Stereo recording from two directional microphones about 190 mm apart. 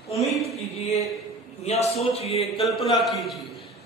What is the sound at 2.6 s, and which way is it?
Speech, centre (ahead or behind).